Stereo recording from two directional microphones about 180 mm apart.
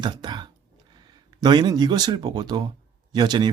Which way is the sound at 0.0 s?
25° right (ahead or behind).